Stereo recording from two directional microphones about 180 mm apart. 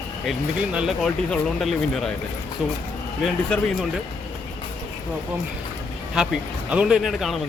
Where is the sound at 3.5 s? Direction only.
5° left (ahead or behind).